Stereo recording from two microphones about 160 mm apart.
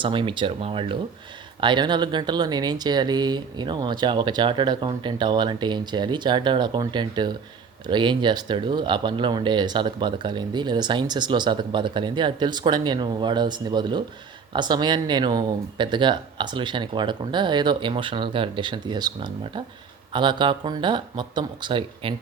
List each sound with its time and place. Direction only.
0.0 s speech: 30° right (ahead or behind)